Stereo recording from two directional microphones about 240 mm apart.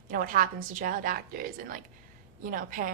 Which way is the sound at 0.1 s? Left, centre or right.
Right.